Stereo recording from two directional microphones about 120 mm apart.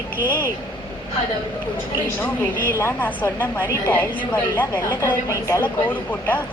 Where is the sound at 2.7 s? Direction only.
20° left (ahead or behind).